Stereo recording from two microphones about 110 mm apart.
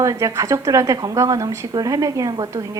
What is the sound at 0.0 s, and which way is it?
A woman's voice, 30° right (ahead or behind).